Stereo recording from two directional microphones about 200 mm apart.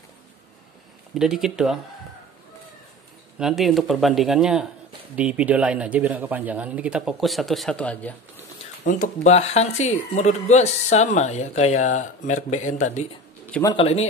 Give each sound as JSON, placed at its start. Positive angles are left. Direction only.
{"t": 1.1, "sound": "speech", "side_deg": 0}
{"t": 3.3, "sound": "speech", "side_deg": 0}
{"t": 8.8, "sound": "speech", "side_deg": 40}
{"t": 13.5, "sound": "a man's voice", "side_deg": 15}
{"t": 13.7, "sound": "speech", "side_deg": 30}